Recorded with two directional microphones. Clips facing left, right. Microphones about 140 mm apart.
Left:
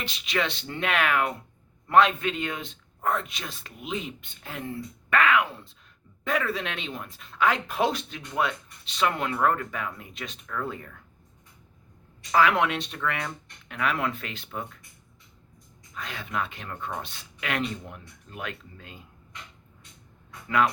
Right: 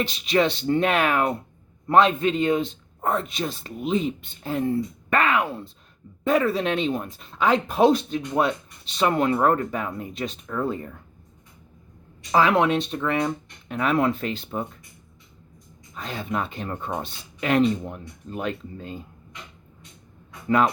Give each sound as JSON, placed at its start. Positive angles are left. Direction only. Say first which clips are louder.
{"t": 0.0, "sound": "speech", "louder": "right 8 dB", "side_deg": -35}
{"t": 12.3, "sound": "speech", "louder": "right 3 dB", "side_deg": -30}
{"t": 16.0, "sound": "speech", "louder": "right 4 dB", "side_deg": -35}